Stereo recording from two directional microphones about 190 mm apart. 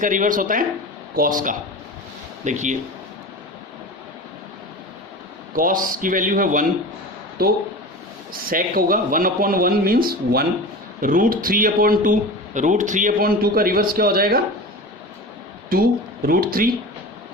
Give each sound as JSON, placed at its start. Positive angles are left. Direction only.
{"t": 0.0, "sound": "speech", "side_deg": -45}
{"t": 5.5, "sound": "speech", "side_deg": -45}
{"t": 11.0, "sound": "speech", "side_deg": -45}
{"t": 15.7, "sound": "speech", "side_deg": -50}